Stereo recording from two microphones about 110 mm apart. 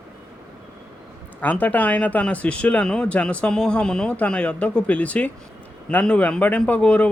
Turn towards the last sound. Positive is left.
turn(degrees=10)  # may be behind; listen again after turning